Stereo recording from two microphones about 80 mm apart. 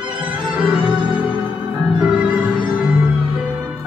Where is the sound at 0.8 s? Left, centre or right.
Right.